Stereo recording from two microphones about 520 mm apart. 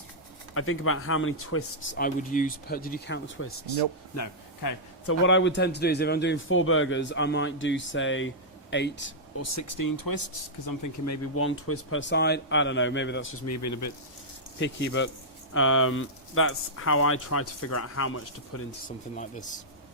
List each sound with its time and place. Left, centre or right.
0.5 s speech: left
14.6 s speech: left
19.1 s speech: centre